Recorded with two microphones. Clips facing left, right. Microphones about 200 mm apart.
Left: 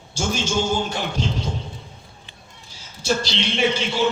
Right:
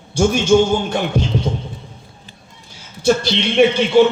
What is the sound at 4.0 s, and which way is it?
Music, 60° right (ahead or behind).